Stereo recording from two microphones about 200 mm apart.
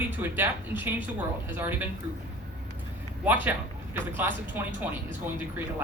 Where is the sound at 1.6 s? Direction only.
10° right (ahead or behind).